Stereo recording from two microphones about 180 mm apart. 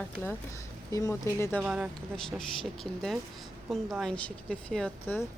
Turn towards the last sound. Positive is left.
turn(degrees=5)  # may be behind; listen again after turning